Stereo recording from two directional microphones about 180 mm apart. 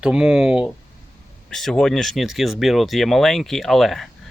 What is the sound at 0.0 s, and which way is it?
Speech, 5° right (ahead or behind).